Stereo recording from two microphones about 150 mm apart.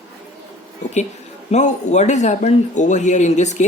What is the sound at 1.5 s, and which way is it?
Speech, 50° left (ahead or behind).